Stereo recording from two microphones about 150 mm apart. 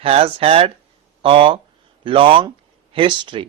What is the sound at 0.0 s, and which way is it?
A man's voice, 40° right (ahead or behind).